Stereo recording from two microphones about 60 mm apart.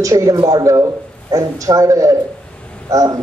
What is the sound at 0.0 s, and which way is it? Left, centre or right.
Speech, right.